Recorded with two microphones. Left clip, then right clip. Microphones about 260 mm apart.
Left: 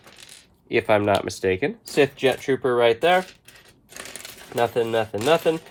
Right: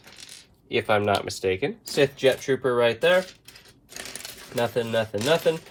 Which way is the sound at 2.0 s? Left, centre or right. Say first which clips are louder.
Even; left.